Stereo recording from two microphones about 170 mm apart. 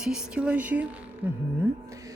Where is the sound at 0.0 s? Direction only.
5° right (ahead or behind).